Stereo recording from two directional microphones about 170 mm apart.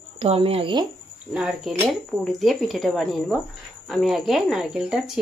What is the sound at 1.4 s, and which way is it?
Speech, centre (ahead or behind).